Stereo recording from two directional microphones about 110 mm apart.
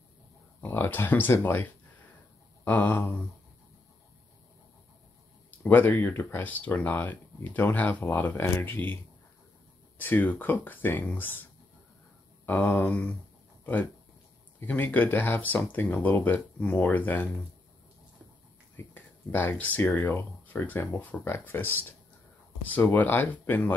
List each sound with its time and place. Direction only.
0.6 s speech: 15° left (ahead or behind)
5.6 s speech: 15° left (ahead or behind)
9.9 s speech: 15° left (ahead or behind)
12.4 s speech: 20° left (ahead or behind)
14.6 s speech: 15° left (ahead or behind)
18.8 s speech: 20° left (ahead or behind)